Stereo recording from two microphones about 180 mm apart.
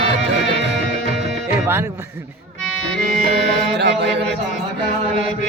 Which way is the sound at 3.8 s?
70° right (ahead or behind).